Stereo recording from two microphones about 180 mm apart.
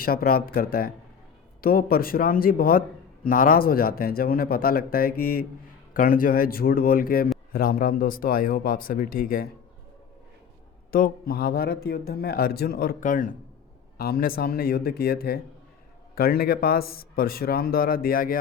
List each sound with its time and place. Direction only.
0.0 s speech: 55° left (ahead or behind)
10.9 s speech: 55° left (ahead or behind)